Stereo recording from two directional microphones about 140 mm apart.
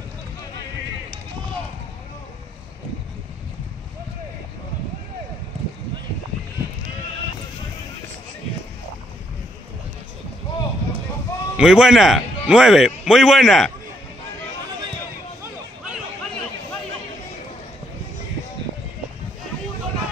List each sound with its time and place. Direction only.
11.5 s a man's voice: 5° right (ahead or behind)